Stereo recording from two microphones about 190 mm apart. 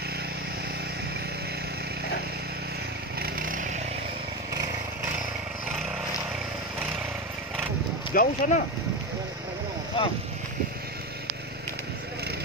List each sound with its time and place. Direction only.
3.2 s chainsaw: 45° right (ahead or behind)
8.1 s speech: 50° left (ahead or behind)
9.9 s speech: 25° left (ahead or behind)